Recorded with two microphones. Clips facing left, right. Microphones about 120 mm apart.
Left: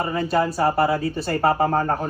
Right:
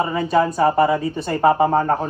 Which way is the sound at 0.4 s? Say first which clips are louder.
Right 3 dB; 20° right (ahead or behind).